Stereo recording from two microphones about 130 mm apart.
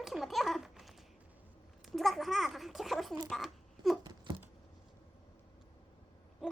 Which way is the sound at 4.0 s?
35° right (ahead or behind).